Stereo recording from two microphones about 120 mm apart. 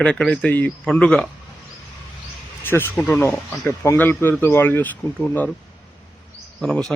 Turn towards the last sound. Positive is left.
turn(degrees=5)  # may be behind; listen again after turning